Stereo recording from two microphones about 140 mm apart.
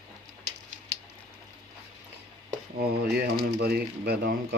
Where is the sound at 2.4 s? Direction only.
90° right.